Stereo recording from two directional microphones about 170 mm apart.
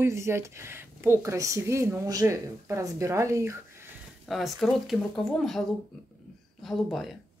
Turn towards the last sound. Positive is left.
turn(degrees=0)  # may be behind; listen again after turning